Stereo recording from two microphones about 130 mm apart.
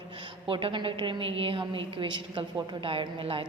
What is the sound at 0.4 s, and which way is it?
A woman's voice, 40° right (ahead or behind).